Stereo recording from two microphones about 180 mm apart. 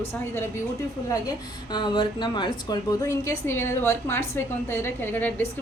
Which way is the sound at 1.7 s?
25° left (ahead or behind).